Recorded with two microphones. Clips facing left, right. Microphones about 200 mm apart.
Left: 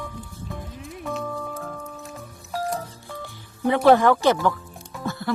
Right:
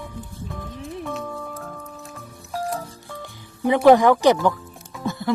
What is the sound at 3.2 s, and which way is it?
Music, 15° right (ahead or behind).